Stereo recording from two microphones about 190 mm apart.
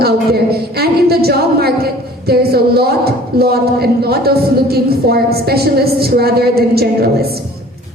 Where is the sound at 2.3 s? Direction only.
55° right (ahead or behind).